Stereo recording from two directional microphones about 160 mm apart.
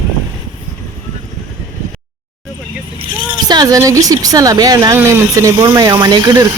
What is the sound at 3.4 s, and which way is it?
Speech, 25° right (ahead or behind).